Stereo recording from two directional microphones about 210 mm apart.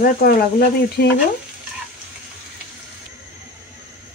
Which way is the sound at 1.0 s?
50° left (ahead or behind).